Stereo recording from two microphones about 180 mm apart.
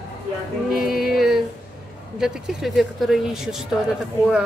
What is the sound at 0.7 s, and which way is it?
Speech, centre (ahead or behind).